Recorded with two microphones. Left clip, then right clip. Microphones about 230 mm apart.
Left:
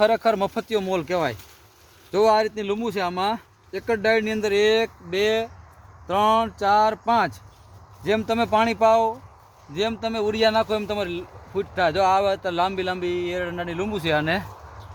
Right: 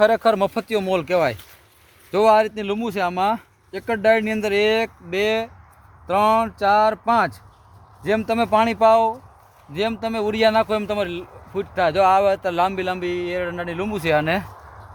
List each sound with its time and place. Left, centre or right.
0.0 s speech: right